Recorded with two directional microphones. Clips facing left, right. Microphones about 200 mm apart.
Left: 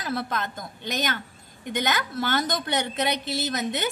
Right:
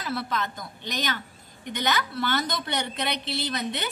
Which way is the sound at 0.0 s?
45° left (ahead or behind).